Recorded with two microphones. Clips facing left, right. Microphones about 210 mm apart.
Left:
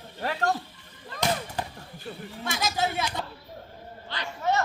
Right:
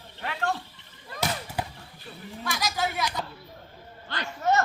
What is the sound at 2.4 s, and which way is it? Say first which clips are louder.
Speech: left 1 dB; 25° left (ahead or behind).